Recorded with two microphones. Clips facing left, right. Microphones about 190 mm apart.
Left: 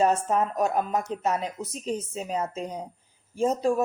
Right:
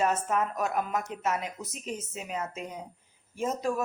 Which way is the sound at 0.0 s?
30° left (ahead or behind).